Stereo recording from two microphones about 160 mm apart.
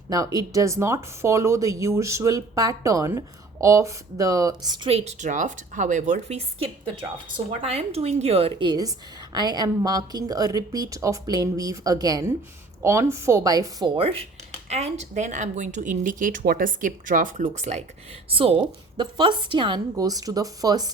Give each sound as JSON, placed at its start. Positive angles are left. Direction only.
{"t": 0.1, "sound": "speech", "side_deg": -20}
{"t": 4.9, "sound": "speech", "side_deg": -40}
{"t": 18.3, "sound": "speech", "side_deg": -35}